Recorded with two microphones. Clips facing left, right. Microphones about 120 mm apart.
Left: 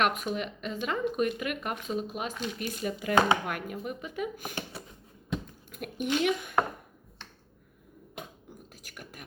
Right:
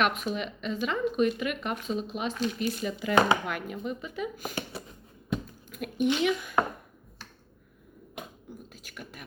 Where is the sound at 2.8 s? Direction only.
50° left (ahead or behind).